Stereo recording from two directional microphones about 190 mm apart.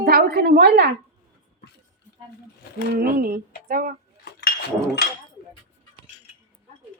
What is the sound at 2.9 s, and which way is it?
Speech, 50° right (ahead or behind).